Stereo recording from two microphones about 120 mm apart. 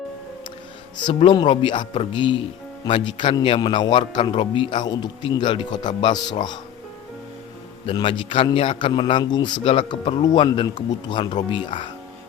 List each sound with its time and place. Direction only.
0.9 s speech: 40° left (ahead or behind)
8.0 s a man's voice: 45° left (ahead or behind)